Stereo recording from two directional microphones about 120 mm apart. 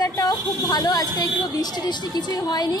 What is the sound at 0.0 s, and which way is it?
A woman's voice, 30° left (ahead or behind).